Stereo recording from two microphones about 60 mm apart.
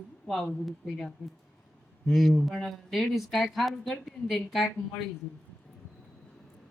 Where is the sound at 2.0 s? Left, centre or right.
Centre.